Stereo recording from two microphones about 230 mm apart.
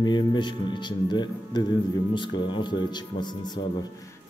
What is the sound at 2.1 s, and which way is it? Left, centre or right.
Speech, left.